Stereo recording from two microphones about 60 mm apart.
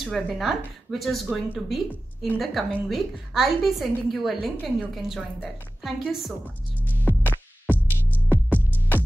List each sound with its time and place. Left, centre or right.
0.0 s a woman's voice: centre
7.1 s music: left